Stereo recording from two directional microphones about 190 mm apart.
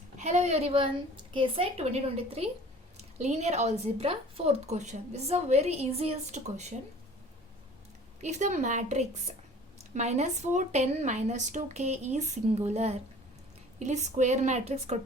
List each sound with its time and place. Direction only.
0.2 s a woman's voice: 35° right (ahead or behind)
8.2 s a woman's voice: 40° right (ahead or behind)